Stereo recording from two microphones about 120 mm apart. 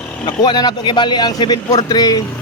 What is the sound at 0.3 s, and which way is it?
A man's voice, 35° left (ahead or behind).